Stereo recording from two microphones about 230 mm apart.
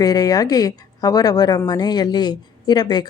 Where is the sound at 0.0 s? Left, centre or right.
Centre.